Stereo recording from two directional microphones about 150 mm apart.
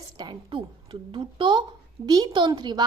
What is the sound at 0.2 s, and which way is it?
A woman's voice, 30° right (ahead or behind).